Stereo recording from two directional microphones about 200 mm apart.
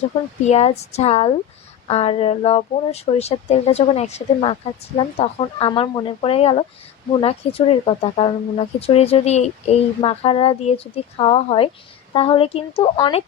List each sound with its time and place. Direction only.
0.4 s speech: 30° left (ahead or behind)